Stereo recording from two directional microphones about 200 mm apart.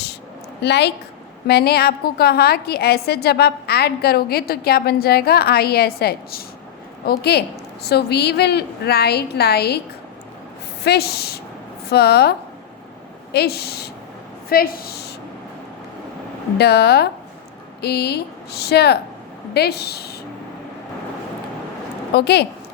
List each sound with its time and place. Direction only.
0.6 s a woman's voice: 55° left (ahead or behind)
10.8 s a woman's voice: 55° left (ahead or behind)
13.3 s a woman's voice: 55° left (ahead or behind)
16.6 s a woman's voice: 55° left (ahead or behind)
22.1 s a woman's voice: 55° left (ahead or behind)